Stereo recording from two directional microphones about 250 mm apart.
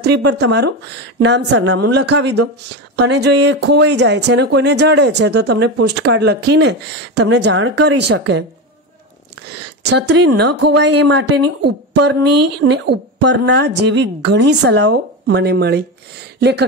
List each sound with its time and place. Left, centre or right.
0.2 s speech: right
9.8 s a woman's voice: right